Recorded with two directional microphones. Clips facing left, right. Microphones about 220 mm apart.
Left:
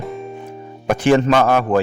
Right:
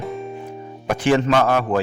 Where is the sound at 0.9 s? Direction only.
45° left (ahead or behind).